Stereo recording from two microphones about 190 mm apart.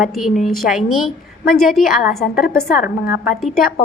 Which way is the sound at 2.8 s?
50° left (ahead or behind).